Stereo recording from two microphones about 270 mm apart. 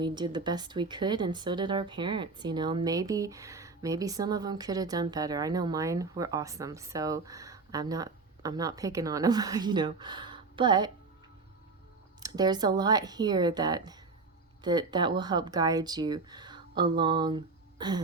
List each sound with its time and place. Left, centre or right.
0.0 s speech: centre
12.2 s speech: centre
17.0 s a sound: centre